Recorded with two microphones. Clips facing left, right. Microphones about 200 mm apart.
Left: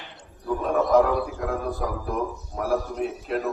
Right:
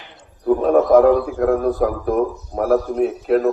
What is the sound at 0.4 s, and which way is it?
A man's voice, 55° right (ahead or behind).